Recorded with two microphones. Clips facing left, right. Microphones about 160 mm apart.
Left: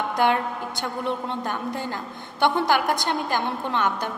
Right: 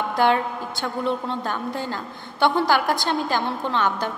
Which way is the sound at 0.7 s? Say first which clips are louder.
Right 4 dB; 20° left (ahead or behind).